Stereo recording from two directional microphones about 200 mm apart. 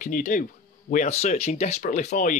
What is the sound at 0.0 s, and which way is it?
Speech, 40° left (ahead or behind).